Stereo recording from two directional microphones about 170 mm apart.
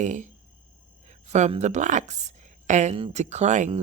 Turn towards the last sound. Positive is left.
turn(degrees=-45)  # may be behind; listen again after turning